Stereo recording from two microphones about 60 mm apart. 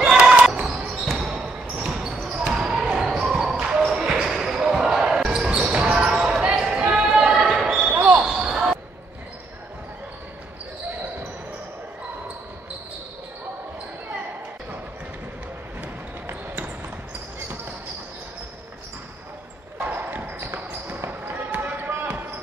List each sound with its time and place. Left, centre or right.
0.0 s basketball bounce: centre
7.9 s basketball bounce: right
8.3 s basketball bounce: centre
19.9 s basketball bounce: right